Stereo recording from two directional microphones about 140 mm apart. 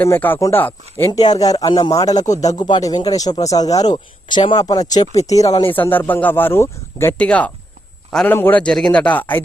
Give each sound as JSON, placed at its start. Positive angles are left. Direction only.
{"t": 0.0, "sound": "speech", "side_deg": 15}
{"t": 5.7, "sound": "speech", "side_deg": 15}